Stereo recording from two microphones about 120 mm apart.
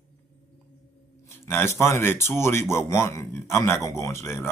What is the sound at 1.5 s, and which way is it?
Speech, 20° left (ahead or behind).